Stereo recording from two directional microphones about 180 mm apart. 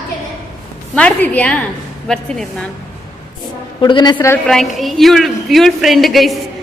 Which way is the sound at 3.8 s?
25° left (ahead or behind).